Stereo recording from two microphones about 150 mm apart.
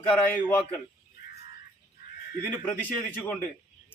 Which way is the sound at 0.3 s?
10° left (ahead or behind).